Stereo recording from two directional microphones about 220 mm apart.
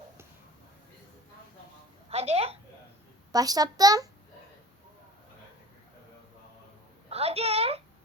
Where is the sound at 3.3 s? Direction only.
15° right (ahead or behind).